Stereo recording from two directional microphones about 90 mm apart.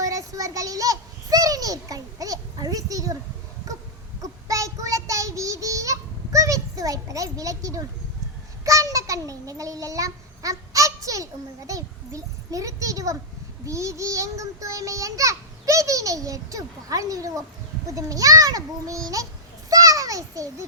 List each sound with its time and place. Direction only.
0.0 s a child's voice: 40° right (ahead or behind)
4.2 s child singing: 40° right (ahead or behind)
8.6 s a child's voice: 40° right (ahead or behind)
19.7 s a sound: 40° right (ahead or behind)